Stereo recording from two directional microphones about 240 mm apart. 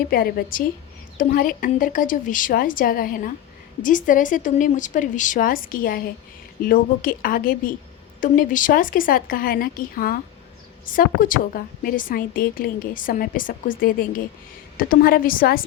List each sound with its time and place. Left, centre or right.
0.1 s a woman's voice: left